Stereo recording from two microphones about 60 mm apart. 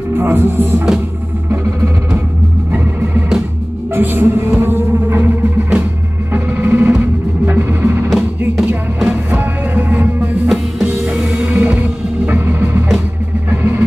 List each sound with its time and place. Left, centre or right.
0.1 s music: right
3.9 s music: right